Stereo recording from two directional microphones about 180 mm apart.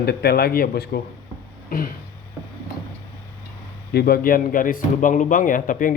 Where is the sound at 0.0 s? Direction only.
60° left (ahead or behind).